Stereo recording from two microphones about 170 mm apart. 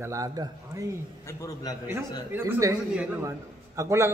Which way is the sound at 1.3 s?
20° left (ahead or behind).